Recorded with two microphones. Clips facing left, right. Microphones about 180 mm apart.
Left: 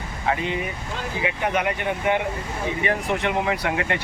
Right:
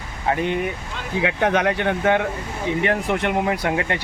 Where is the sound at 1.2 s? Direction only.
90° right.